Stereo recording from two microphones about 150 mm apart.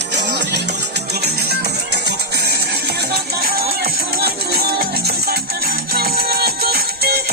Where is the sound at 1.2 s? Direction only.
90° right.